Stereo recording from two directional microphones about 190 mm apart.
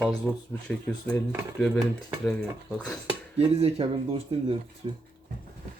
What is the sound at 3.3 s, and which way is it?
Speech, 30° right (ahead or behind).